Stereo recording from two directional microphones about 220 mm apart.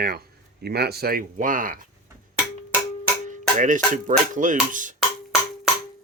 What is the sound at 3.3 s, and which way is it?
Music, 35° right (ahead or behind).